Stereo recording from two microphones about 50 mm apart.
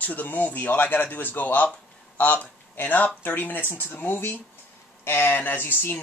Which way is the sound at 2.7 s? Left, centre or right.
Left.